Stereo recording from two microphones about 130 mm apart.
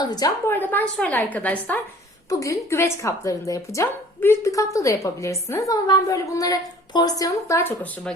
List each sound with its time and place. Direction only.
0.0 s a woman's voice: 30° left (ahead or behind)
0.4 s a woman's voice: 15° left (ahead or behind)
7.8 s a woman's voice: 10° left (ahead or behind)